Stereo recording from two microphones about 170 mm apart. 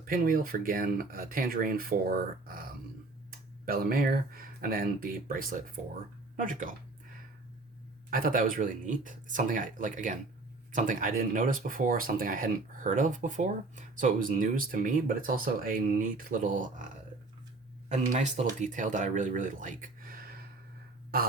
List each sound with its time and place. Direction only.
0.0 s speech: 55° right (ahead or behind)
3.7 s speech: 60° right (ahead or behind)
8.1 s speech: 55° right (ahead or behind)
17.8 s speech: 45° right (ahead or behind)